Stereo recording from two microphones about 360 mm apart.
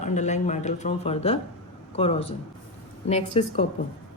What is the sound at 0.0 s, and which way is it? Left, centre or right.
Speech, centre.